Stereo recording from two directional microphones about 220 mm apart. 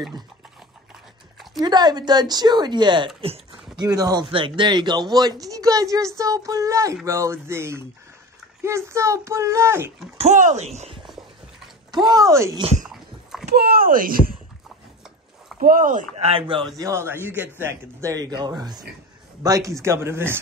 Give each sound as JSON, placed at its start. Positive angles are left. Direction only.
{"t": 1.6, "sound": "a man's voice", "side_deg": -20}
{"t": 10.1, "sound": "speech", "side_deg": -30}
{"t": 12.1, "sound": "a child's voice", "side_deg": -15}
{"t": 12.8, "sound": "dog", "side_deg": 0}
{"t": 13.5, "sound": "speech", "side_deg": -45}
{"t": 15.6, "sound": "speech", "side_deg": -40}
{"t": 16.7, "sound": "a child's voice", "side_deg": -15}